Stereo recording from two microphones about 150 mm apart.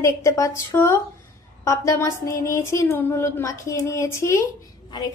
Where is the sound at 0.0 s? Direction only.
20° left (ahead or behind).